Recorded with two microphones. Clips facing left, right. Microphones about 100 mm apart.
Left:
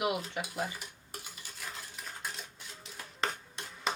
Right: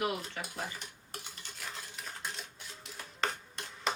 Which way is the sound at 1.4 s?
Centre (ahead or behind).